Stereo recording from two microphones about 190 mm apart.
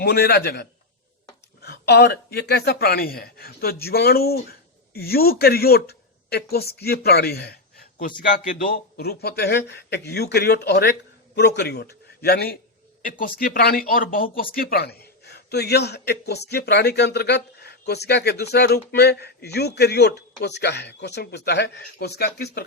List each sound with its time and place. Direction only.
0.0 s a man's voice: 55° left (ahead or behind)